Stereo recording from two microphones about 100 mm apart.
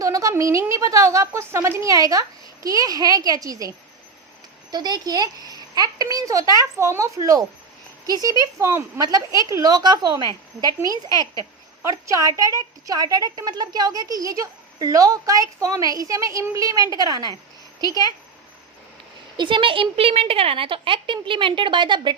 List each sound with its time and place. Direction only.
0.0 s a woman's voice: 35° right (ahead or behind)
11.8 s a woman's voice: 30° right (ahead or behind)
19.4 s a woman's voice: 55° right (ahead or behind)